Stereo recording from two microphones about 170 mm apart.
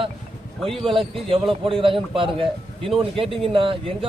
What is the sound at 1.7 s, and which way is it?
Speech, 30° right (ahead or behind).